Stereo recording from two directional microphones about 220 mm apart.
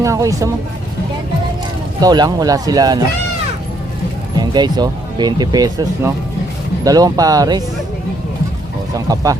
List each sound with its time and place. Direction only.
0.0 s speech: 15° right (ahead or behind)
2.0 s speech: 15° right (ahead or behind)
4.4 s speech: 20° right (ahead or behind)
9.0 s speech: 15° right (ahead or behind)